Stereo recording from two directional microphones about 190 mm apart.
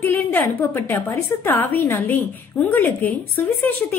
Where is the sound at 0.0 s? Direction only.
10° left (ahead or behind).